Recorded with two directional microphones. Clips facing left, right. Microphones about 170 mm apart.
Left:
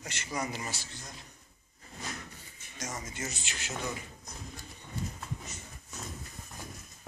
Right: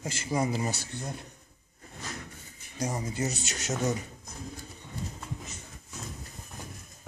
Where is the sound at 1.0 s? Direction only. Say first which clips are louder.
Right 10 dB; 60° right (ahead or behind).